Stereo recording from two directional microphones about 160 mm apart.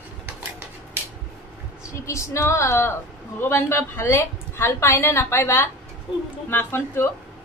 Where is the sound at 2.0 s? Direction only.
20° left (ahead or behind).